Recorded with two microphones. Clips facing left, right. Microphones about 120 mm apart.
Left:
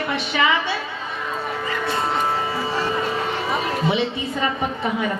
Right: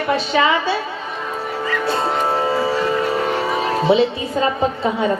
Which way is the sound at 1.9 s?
30° right (ahead or behind).